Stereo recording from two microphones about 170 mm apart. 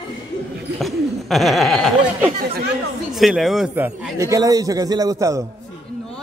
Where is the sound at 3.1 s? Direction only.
Centre (ahead or behind); by 5.4 s 20° right (ahead or behind).